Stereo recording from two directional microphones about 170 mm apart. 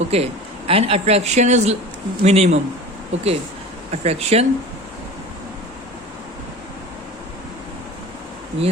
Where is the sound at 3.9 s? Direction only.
40° right (ahead or behind).